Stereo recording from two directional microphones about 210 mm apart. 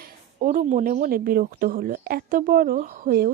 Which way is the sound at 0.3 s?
40° right (ahead or behind).